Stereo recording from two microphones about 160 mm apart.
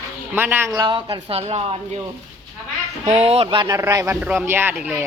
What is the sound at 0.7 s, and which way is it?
A woman's voice, 30° right (ahead or behind).